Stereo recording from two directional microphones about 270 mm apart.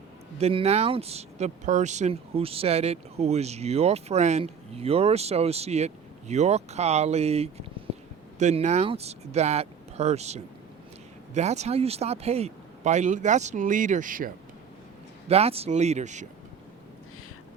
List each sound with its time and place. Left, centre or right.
0.3 s speech: right